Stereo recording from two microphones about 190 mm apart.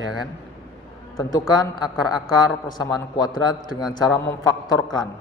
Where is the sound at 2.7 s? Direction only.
20° left (ahead or behind).